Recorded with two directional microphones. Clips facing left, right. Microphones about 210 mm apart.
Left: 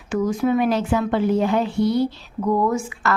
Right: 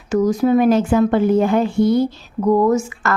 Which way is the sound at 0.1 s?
40° right (ahead or behind).